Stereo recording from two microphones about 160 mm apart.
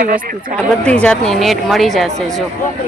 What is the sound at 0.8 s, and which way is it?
Speech, 5° left (ahead or behind).